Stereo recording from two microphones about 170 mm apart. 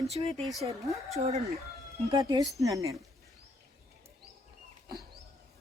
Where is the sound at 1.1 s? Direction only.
40° right (ahead or behind).